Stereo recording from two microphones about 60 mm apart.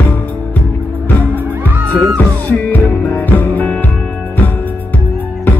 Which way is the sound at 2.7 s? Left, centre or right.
Left.